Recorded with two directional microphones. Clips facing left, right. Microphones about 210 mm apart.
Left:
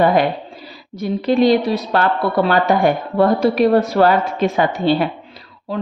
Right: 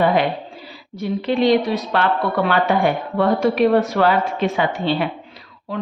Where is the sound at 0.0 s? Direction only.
45° left (ahead or behind).